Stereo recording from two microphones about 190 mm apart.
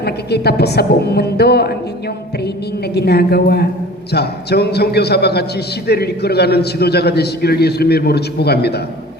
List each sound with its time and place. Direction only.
0.0 s a man's voice: 60° left (ahead or behind)
2.9 s a man's voice: 55° left (ahead or behind)